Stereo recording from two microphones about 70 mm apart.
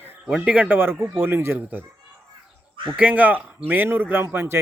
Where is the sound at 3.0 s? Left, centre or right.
Right.